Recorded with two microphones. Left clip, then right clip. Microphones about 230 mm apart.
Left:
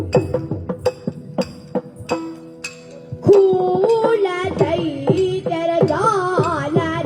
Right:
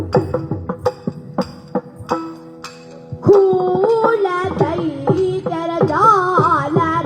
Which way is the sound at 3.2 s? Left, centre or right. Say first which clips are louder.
Right 1 dB; right.